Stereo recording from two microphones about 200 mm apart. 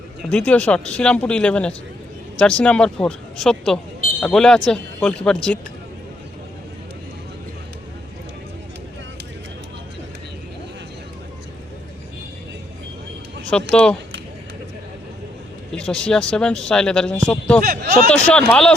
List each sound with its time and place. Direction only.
0.2 s speech: 5° left (ahead or behind)
13.5 s speech: 5° left (ahead or behind)
15.7 s speech: 5° left (ahead or behind)
17.7 s speech: 45° right (ahead or behind)
18.1 s speech: 5° left (ahead or behind)